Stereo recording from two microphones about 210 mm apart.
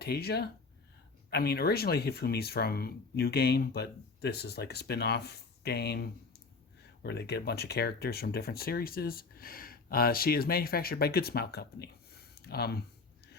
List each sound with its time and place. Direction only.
0.0 s speech: 50° left (ahead or behind)